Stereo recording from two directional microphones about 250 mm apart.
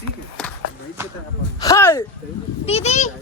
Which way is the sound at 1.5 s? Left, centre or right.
Centre.